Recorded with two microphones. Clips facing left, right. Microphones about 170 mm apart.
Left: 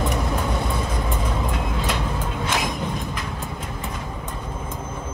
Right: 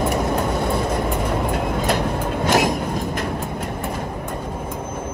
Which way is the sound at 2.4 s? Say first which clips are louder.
Right 9 dB; 40° right (ahead or behind).